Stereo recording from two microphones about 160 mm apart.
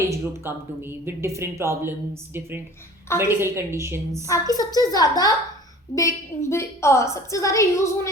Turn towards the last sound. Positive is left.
turn(degrees=20)  # may be behind; listen again after turning